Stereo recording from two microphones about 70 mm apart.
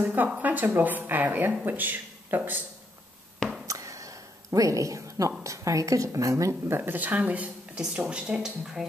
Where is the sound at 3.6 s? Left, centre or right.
Right.